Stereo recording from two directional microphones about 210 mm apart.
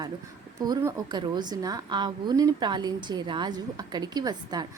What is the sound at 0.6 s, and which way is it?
A woman's voice, 15° right (ahead or behind).